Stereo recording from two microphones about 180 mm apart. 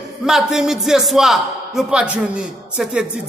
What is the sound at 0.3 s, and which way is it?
A woman's voice, centre (ahead or behind).